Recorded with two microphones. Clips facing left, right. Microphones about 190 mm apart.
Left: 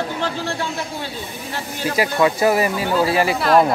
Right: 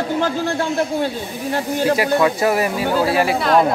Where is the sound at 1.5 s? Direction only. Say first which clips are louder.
Right 7 dB; 50° right (ahead or behind).